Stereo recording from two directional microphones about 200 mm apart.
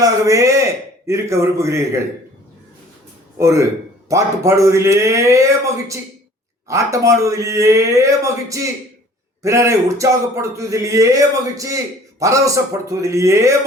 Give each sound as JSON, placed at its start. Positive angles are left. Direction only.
{"t": 0.0, "sound": "speech", "side_deg": -15}
{"t": 3.3, "sound": "speech", "side_deg": -15}